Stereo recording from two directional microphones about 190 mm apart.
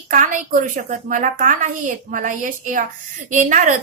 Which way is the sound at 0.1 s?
40° right (ahead or behind).